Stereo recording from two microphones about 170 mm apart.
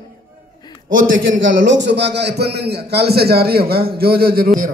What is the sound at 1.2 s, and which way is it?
A man's voice, 90° right.